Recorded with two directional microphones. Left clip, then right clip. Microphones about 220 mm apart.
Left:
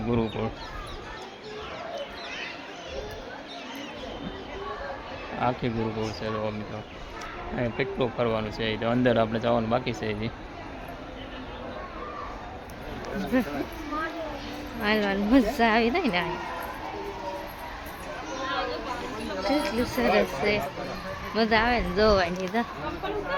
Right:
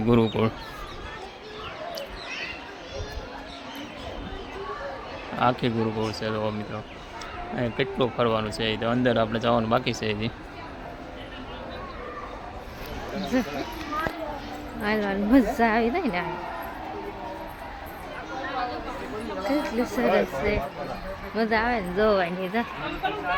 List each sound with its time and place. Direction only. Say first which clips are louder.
0.1 s speech: right 6 dB; 20° right (ahead or behind)
5.4 s speech: right 4 dB; 15° right (ahead or behind)
7.5 s speech: right 2 dB; 5° right (ahead or behind)
13.3 s a woman's voice: even; centre (ahead or behind)
14.8 s a woman's voice: left 1 dB; centre (ahead or behind)
19.5 s a woman's voice: even; 5° right (ahead or behind)